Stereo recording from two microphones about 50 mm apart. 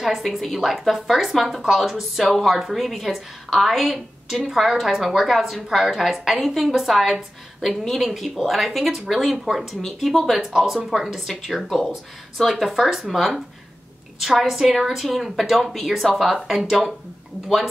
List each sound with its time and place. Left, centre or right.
0.0 s a woman's voice: centre